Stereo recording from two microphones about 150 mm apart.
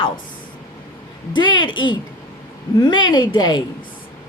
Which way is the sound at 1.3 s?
30° left (ahead or behind).